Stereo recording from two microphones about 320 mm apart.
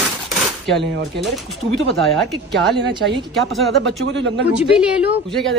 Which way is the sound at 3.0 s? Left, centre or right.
Centre.